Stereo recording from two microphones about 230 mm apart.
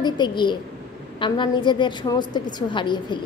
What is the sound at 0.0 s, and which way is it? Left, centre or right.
A woman's voice, centre.